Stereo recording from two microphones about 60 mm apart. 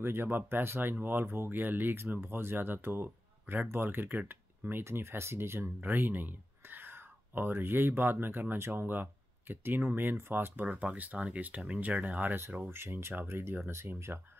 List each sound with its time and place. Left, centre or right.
0.0 s speech: right
5.8 s speech: right
10.7 s speech: right
12.4 s speech: right